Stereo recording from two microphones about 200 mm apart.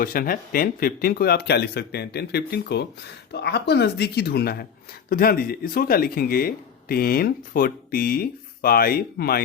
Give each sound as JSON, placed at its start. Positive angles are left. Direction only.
{"t": 0.0, "sound": "speech", "side_deg": 45}